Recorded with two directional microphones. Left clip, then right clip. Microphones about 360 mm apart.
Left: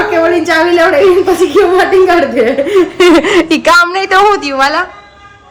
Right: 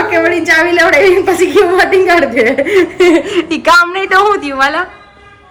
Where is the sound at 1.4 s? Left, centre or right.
Centre.